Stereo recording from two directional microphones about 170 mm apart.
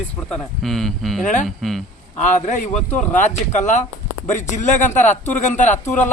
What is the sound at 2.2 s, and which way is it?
Speech, 45° left (ahead or behind).